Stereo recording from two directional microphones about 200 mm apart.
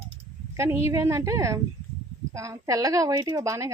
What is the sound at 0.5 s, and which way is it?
Speech, 15° right (ahead or behind).